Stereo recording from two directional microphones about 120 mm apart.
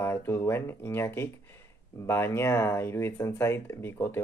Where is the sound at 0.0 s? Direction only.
20° left (ahead or behind).